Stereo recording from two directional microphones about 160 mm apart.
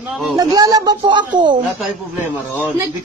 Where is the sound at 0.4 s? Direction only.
25° right (ahead or behind).